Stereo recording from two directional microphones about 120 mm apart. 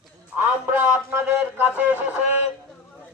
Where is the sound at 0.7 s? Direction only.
15° right (ahead or behind).